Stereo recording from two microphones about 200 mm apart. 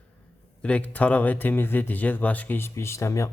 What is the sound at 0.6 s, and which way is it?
Speech, 5° left (ahead or behind).